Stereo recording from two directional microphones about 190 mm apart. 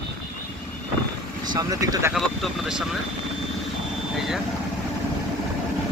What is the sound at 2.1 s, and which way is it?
Speech, centre (ahead or behind).